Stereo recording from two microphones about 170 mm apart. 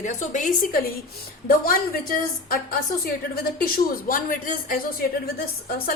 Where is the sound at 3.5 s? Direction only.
60° left (ahead or behind).